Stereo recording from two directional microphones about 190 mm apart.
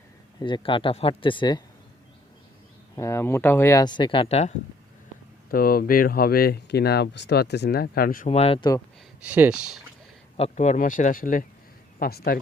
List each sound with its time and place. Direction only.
0.3 s speech: 25° left (ahead or behind)
2.9 s speech: 15° left (ahead or behind); by 4.5 s 35° left (ahead or behind)
5.5 s speech: 50° left (ahead or behind)
8.3 s speech: 30° left (ahead or behind)
9.2 s speech: 10° right (ahead or behind)
10.3 s speech: 35° left (ahead or behind); by 12.4 s 55° left (ahead or behind)